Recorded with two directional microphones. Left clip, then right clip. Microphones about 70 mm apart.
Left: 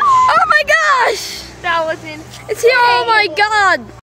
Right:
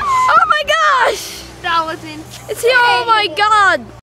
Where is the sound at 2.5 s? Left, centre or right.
Centre.